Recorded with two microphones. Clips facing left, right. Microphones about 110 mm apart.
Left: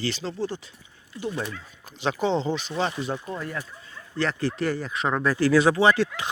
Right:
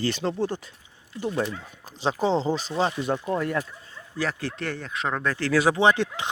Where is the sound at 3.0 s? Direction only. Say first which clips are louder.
Right 5 dB; 55° right (ahead or behind).